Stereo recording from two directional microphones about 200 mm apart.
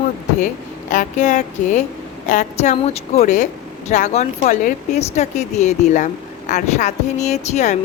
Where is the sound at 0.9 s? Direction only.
40° left (ahead or behind).